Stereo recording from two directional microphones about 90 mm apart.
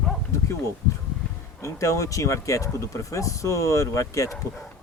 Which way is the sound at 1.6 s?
35° left (ahead or behind).